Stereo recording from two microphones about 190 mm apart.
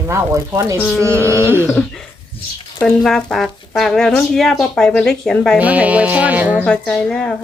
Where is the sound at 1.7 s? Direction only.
5° left (ahead or behind).